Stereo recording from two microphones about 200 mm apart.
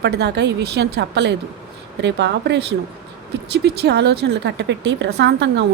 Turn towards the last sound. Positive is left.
turn(degrees=-60)  # may be behind; listen again after turning